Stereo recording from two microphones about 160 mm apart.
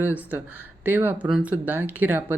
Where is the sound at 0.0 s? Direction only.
10° right (ahead or behind).